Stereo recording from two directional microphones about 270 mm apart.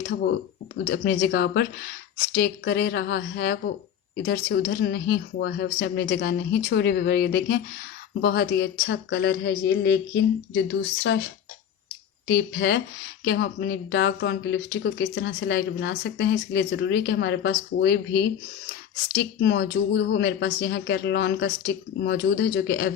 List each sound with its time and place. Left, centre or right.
0.1 s speech: left
12.3 s speech: left